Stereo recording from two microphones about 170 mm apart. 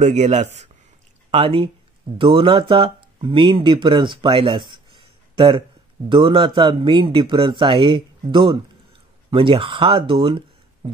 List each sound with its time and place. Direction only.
0.0 s speech: 40° right (ahead or behind)